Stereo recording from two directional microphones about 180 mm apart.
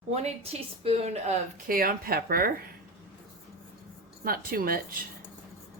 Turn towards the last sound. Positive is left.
turn(degrees=-55)  # may be behind; listen again after turning